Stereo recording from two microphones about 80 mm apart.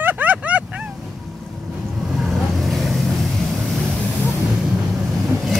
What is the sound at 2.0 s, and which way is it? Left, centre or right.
Vehicle, centre.